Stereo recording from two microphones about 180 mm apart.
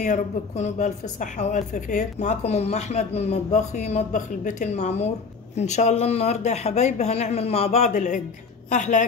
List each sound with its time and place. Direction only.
0.0 s a woman's voice: 40° left (ahead or behind)